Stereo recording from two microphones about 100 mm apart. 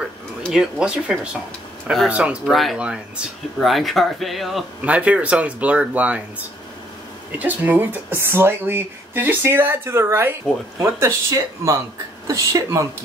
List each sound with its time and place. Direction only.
0.5 s speech: 5° right (ahead or behind)
2.4 s speech: centre (ahead or behind)
2.8 s speech: 10° right (ahead or behind)
3.6 s speech: centre (ahead or behind)
4.8 s speech: 15° right (ahead or behind)
7.3 s speech: 15° right (ahead or behind); by 12.8 s 30° right (ahead or behind)